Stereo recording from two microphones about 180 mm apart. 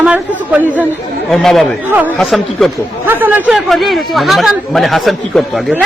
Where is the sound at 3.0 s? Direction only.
10° right (ahead or behind).